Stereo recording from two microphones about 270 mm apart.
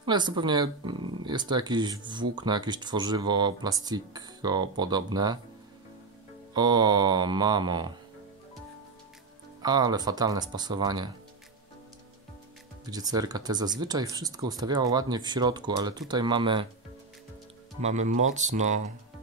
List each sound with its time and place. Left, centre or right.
0.0 s speech: centre
6.5 s speech: centre
9.6 s speech: centre
12.9 s speech: centre
17.7 s speech: right